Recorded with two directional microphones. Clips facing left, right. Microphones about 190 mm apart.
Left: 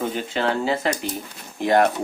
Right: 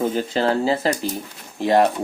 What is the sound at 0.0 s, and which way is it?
Speech, 40° right (ahead or behind).